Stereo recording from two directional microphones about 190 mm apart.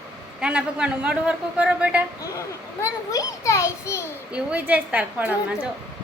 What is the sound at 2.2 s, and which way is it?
A child's voice, 15° left (ahead or behind).